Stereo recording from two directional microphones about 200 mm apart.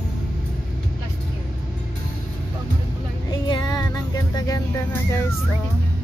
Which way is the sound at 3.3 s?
20° left (ahead or behind).